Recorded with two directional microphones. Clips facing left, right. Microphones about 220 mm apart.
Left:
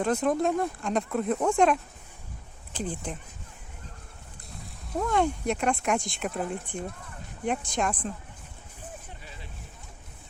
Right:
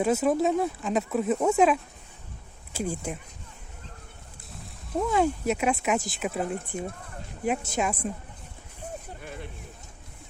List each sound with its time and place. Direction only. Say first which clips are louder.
0.0 s speech: right 2 dB; 5° right (ahead or behind)
4.9 s speech: right 2 dB; 5° right (ahead or behind)
9.2 s a sound: right 8 dB; 55° right (ahead or behind)